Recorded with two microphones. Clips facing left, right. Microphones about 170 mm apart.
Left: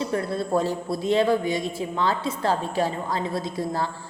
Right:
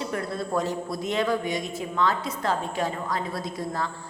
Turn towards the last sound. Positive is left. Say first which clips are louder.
# left 3 dB
turn(degrees=30)  # may be behind; listen again after turning